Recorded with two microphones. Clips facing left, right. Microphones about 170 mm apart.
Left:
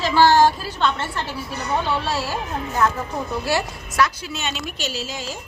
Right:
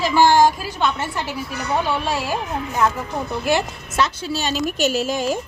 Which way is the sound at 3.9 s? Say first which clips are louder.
Right 1 dB; 25° right (ahead or behind).